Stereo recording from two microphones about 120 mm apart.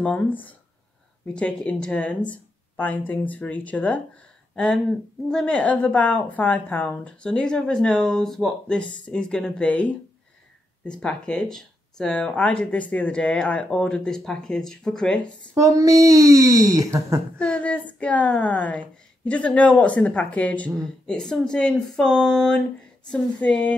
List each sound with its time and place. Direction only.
0.0 s a woman's voice: 15° left (ahead or behind)
5.3 s a woman's voice: 5° left (ahead or behind)
11.0 s a woman's voice: 5° left (ahead or behind)
15.5 s speech: 30° right (ahead or behind)
17.4 s a woman's voice: 10° left (ahead or behind)